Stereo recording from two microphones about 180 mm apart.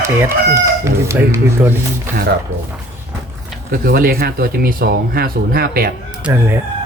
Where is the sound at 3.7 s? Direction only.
55° right (ahead or behind).